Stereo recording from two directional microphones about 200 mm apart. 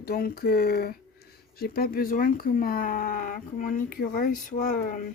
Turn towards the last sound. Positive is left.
turn(degrees=40)  # may be behind; listen again after turning